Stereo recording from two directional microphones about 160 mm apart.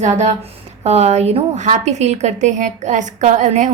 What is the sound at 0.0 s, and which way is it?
A woman's voice, 45° right (ahead or behind).